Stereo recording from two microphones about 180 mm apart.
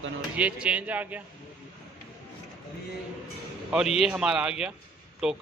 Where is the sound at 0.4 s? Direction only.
5° right (ahead or behind).